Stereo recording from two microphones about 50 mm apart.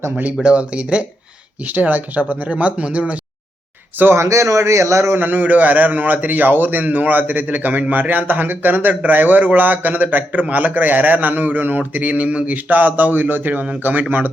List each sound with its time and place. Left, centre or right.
0.4 s speech: right
1.6 s a man's voice: right
4.1 s a man's voice: right
5.1 s a man's voice: right